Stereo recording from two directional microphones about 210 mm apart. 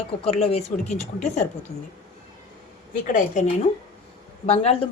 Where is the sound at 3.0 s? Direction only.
40° left (ahead or behind).